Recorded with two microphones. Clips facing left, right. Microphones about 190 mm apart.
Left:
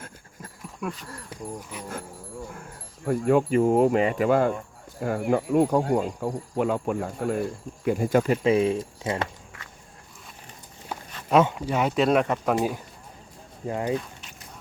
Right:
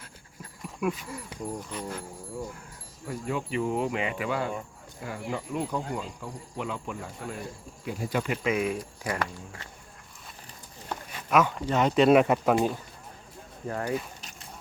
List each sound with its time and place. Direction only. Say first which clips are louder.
0.8 s speech: right 4 dB; 5° right (ahead or behind)
1.7 s speech: right 2 dB; 10° left (ahead or behind)
3.1 s speech: left 11 dB; 55° left (ahead or behind)
8.2 s speech: left 7 dB; 35° left (ahead or behind)
10.9 s walk: even; 10° left (ahead or behind)
11.3 s speech: left 4 dB; 30° left (ahead or behind)
11.5 s speech: right 1 dB; 10° left (ahead or behind)
13.7 s speech: left 4 dB; 15° left (ahead or behind)